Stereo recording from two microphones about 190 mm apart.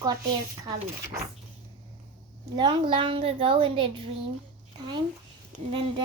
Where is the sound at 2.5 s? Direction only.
25° right (ahead or behind).